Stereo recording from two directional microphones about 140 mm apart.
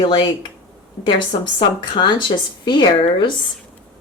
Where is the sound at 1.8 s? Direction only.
35° left (ahead or behind).